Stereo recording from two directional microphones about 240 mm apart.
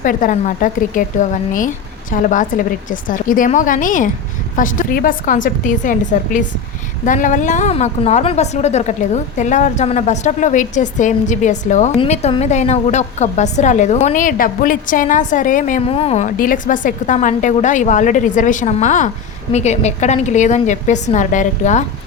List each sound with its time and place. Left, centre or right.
0.0 s a woman's voice: left